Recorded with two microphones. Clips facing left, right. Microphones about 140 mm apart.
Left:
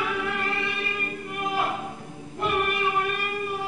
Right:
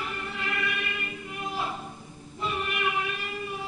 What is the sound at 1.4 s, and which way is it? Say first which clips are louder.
Music: left 6 dB; 65° left (ahead or behind).